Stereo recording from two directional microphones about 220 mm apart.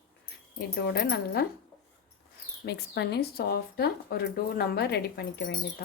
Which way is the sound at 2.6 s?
50° left (ahead or behind).